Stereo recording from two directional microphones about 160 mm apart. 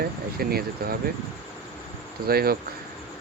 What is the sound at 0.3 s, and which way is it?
Speech, 70° right (ahead or behind).